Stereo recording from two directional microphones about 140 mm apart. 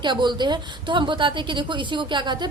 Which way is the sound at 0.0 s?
35° right (ahead or behind).